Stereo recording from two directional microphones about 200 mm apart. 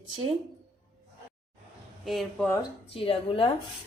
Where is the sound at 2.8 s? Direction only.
30° left (ahead or behind).